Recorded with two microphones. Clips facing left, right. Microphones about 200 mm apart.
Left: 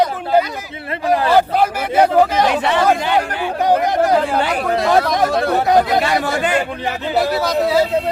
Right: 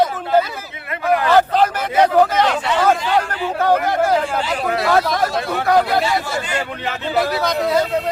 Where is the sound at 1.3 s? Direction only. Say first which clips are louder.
Right 2 dB; 10° left (ahead or behind).